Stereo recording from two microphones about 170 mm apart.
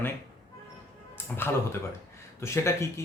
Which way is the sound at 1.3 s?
5° left (ahead or behind).